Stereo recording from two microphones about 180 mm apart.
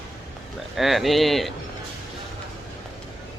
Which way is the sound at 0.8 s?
Centre (ahead or behind).